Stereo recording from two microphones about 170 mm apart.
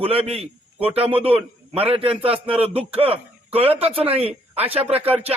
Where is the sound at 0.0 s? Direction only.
35° right (ahead or behind).